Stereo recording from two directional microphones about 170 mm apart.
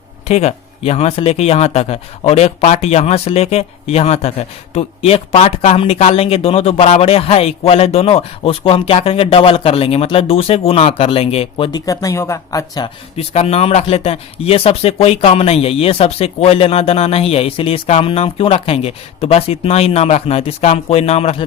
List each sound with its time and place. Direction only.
0.3 s speech: 40° left (ahead or behind); by 12.9 s 20° left (ahead or behind)
13.1 s speech: 35° left (ahead or behind)